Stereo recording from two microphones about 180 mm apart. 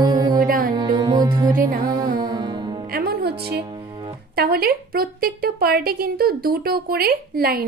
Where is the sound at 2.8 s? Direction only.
55° right (ahead or behind).